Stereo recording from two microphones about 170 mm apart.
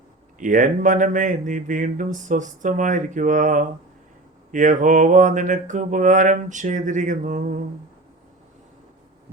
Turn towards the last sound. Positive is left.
turn(degrees=-50)  # may be behind; listen again after turning